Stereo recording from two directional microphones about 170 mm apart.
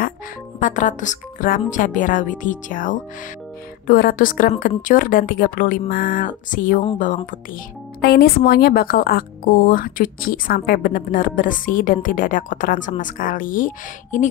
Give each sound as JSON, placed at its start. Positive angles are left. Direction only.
{"t": 0.6, "sound": "a woman's voice", "side_deg": 50}
{"t": 8.0, "sound": "a woman's voice", "side_deg": 65}